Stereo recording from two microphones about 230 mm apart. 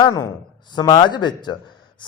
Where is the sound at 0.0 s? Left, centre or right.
Centre.